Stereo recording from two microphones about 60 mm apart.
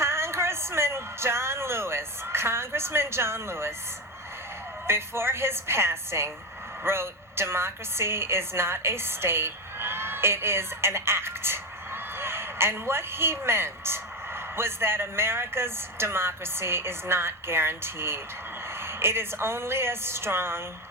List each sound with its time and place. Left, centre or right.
0.0 s speech: right
4.9 s a woman's voice: right